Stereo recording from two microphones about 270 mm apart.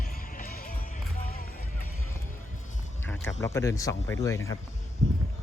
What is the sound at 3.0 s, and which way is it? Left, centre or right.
Speech, centre.